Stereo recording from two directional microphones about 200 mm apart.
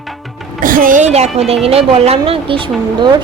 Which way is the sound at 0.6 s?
45° right (ahead or behind).